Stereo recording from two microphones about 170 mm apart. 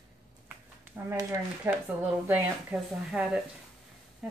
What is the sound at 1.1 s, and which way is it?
Speech, 15° right (ahead or behind).